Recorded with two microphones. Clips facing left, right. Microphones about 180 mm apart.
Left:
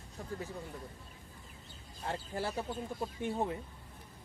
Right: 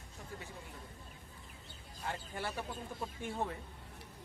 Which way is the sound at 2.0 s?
30° left (ahead or behind).